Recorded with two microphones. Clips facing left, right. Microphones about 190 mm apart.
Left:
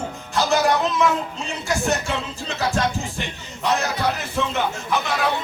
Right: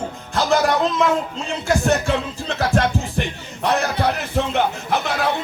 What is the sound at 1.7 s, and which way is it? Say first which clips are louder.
Speech: right 5 dB; 55° right (ahead or behind).